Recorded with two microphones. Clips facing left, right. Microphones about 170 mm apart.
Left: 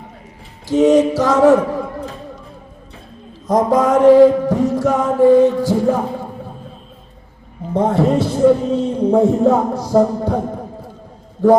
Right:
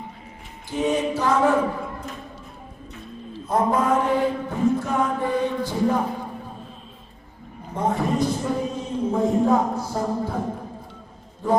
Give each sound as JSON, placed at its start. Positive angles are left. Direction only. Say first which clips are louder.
{"t": 0.7, "sound": "mantra", "louder": "left 11 dB", "side_deg": 85}
{"t": 3.5, "sound": "mantra", "louder": "left 7 dB", "side_deg": 90}
{"t": 5.0, "sound": "music", "louder": "left 13 dB", "side_deg": 45}
{"t": 7.7, "sound": "a man's voice", "louder": "left 8 dB", "side_deg": 80}
{"t": 11.4, "sound": "a man's voice", "louder": "left 10 dB", "side_deg": 80}